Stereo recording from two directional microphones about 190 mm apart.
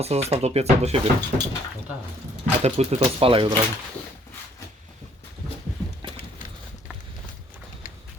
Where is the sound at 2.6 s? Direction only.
35° right (ahead or behind).